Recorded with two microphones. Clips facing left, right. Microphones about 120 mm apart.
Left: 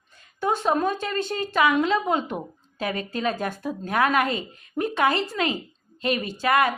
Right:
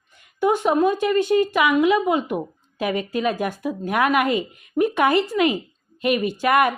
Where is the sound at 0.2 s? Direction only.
15° right (ahead or behind).